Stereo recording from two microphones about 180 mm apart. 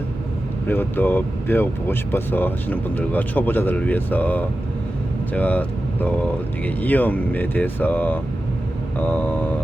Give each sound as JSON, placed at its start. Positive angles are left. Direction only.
{"t": 0.7, "sound": "speech", "side_deg": 10}